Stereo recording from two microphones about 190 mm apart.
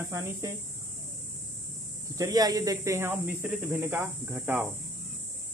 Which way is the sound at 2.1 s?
20° right (ahead or behind).